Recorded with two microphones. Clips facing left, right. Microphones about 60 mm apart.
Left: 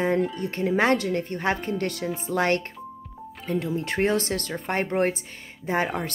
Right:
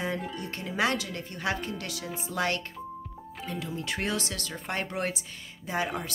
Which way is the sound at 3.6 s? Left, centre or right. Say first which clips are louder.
Left 8 dB; left.